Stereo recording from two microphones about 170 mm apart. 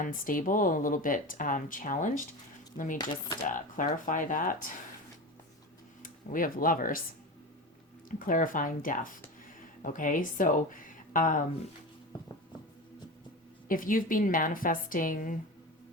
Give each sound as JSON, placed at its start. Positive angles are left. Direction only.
{"t": 0.0, "sound": "speech", "side_deg": 50}
{"t": 6.0, "sound": "speech", "side_deg": 55}
{"t": 8.2, "sound": "speech", "side_deg": 50}
{"t": 13.7, "sound": "speech", "side_deg": 55}